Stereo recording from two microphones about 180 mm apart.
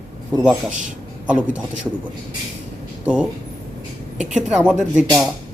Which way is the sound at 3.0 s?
5° right (ahead or behind).